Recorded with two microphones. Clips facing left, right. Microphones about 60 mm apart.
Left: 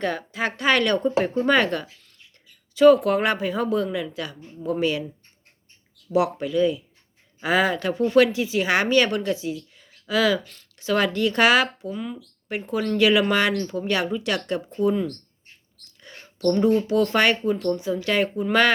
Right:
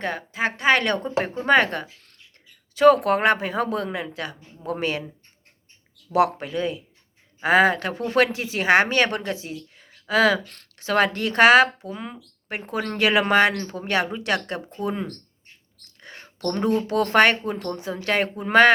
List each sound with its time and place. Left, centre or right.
0.0 s speech: right
2.7 s speech: right
6.1 s speech: right
11.9 s speech: right
12.5 s speech: right
15.8 s mouse: right
16.5 s speech: right